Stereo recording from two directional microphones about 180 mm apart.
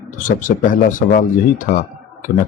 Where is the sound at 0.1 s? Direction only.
45° left (ahead or behind).